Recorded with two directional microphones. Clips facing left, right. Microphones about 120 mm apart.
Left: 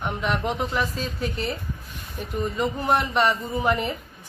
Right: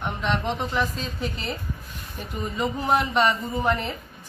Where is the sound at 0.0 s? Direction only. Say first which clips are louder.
Even; 5° left (ahead or behind).